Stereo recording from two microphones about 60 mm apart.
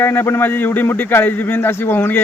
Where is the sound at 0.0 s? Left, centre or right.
Left.